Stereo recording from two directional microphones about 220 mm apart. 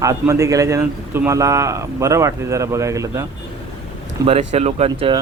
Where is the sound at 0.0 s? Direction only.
15° right (ahead or behind).